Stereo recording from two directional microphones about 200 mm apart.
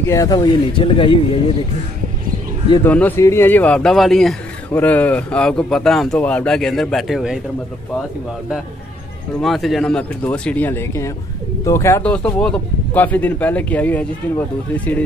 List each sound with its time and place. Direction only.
0.0 s speech: 15° left (ahead or behind)
2.8 s speech: 10° left (ahead or behind)
9.4 s a man's voice: centre (ahead or behind)